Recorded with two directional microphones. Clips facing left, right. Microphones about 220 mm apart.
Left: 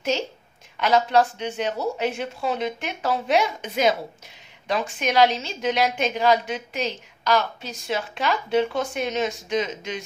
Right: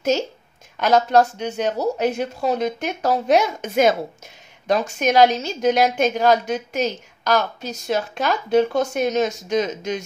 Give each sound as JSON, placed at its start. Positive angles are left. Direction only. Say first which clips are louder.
{"t": 0.1, "sound": "a woman's voice", "louder": "right 4 dB", "side_deg": -45}